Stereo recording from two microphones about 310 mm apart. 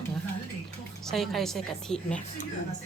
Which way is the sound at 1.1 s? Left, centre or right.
Centre.